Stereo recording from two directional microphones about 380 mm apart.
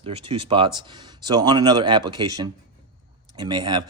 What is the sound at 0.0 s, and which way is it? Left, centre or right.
Speech, centre.